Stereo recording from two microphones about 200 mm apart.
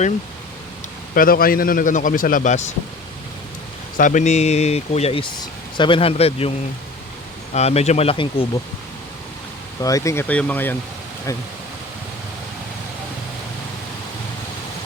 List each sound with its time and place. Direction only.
1.1 s a man's voice: 45° left (ahead or behind)
3.9 s speech: 40° left (ahead or behind)
7.5 s speech: 30° left (ahead or behind)
9.8 s speech: 15° left (ahead or behind)